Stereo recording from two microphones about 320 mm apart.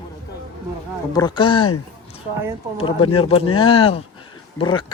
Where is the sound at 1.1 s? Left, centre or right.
Centre.